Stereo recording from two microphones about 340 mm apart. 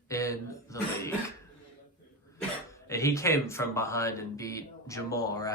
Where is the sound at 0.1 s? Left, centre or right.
Centre.